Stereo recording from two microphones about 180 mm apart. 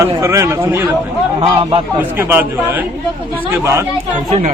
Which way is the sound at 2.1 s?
10° right (ahead or behind).